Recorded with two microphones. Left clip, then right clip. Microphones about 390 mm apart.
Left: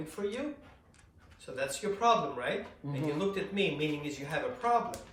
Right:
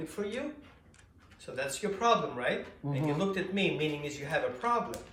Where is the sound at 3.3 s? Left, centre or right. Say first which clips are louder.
Right 1 dB; centre.